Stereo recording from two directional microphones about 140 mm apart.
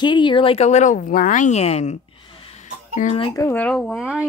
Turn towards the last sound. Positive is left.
turn(degrees=-5)  # may be behind; listen again after turning